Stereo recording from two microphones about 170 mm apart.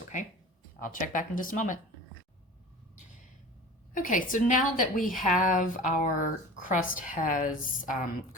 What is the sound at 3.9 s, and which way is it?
A woman's voice, 50° left (ahead or behind).